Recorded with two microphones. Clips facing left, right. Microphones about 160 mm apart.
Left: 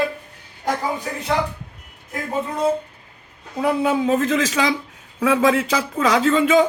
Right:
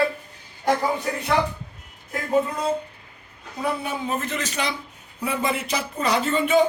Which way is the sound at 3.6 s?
90° left.